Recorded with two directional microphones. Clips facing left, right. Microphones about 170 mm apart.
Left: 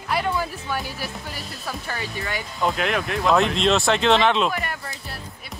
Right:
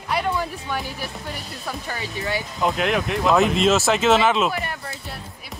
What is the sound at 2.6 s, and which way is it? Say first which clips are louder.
Speech: right 1 dB; centre (ahead or behind).